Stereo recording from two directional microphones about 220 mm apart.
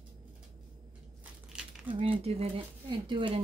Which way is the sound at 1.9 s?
25° right (ahead or behind).